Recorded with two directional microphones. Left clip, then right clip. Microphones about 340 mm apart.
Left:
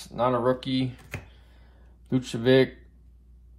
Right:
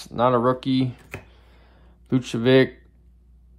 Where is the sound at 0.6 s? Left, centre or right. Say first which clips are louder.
Right 5 dB; centre.